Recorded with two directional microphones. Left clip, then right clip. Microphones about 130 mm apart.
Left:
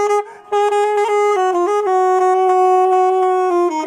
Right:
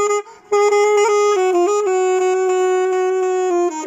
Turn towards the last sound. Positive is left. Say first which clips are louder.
# left 3 dB
turn(degrees=-15)  # may be behind; listen again after turning